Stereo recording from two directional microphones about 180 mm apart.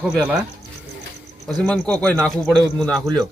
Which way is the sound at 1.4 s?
5° left (ahead or behind).